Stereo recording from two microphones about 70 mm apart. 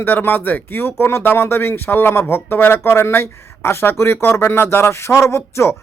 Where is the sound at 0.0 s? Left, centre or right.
Left.